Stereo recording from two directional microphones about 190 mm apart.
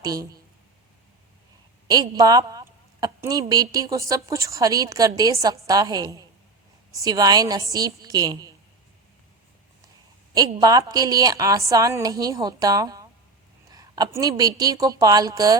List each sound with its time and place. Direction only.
0.0 s a woman's voice: 20° right (ahead or behind)
1.9 s a woman's voice: 20° right (ahead or behind)
10.3 s a woman's voice: 20° right (ahead or behind)